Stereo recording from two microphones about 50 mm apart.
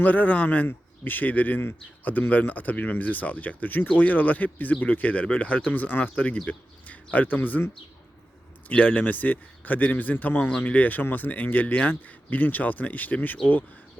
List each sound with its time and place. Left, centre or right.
0.0 s speech: left
8.7 s speech: left